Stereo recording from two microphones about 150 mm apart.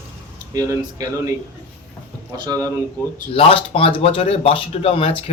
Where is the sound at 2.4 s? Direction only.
25° right (ahead or behind).